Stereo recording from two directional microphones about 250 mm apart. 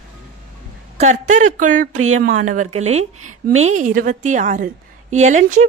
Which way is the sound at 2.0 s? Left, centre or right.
Right.